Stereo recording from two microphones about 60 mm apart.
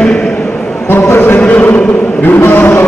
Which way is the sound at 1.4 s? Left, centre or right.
Left.